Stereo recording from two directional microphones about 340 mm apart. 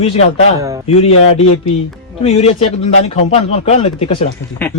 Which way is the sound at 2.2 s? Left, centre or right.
Centre.